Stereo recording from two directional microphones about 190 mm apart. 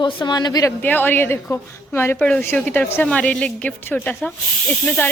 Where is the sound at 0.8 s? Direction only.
10° left (ahead or behind).